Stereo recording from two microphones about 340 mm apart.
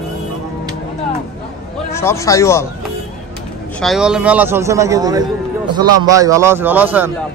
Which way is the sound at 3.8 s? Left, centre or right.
Centre.